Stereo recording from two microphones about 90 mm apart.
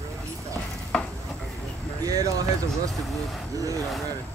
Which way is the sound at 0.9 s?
5° left (ahead or behind).